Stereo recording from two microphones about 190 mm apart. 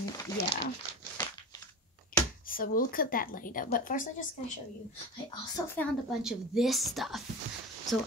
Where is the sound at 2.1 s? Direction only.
50° left (ahead or behind).